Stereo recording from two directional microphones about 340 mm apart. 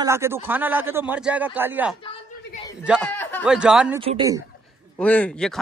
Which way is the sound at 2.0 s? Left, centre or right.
Centre.